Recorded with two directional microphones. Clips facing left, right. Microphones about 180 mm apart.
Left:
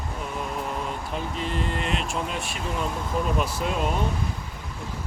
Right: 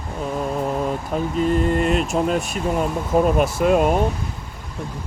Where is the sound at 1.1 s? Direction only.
45° right (ahead or behind).